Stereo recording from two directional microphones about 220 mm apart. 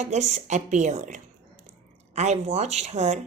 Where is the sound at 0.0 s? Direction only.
30° right (ahead or behind).